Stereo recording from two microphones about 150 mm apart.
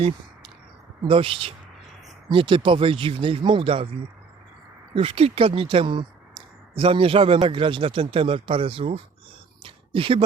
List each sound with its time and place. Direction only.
1.0 s speech: 35° right (ahead or behind)
4.9 s speech: 40° right (ahead or behind)
9.6 s a sound: 35° right (ahead or behind)